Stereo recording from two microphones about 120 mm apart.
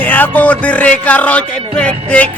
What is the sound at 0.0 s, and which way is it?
Music, 15° left (ahead or behind).